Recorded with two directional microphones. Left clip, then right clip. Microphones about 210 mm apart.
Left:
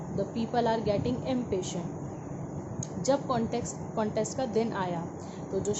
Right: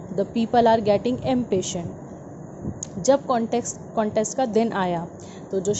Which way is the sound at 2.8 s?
25° right (ahead or behind).